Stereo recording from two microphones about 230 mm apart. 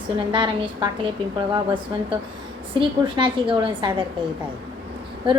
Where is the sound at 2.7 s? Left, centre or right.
Right.